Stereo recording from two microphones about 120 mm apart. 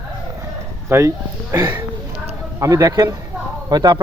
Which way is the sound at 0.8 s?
25° right (ahead or behind).